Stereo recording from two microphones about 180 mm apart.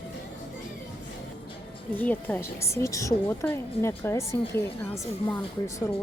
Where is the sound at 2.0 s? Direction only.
10° left (ahead or behind).